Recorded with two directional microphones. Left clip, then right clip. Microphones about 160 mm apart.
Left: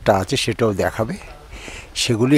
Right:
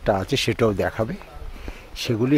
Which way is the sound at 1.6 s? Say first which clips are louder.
Left 7 dB; 40° left (ahead or behind).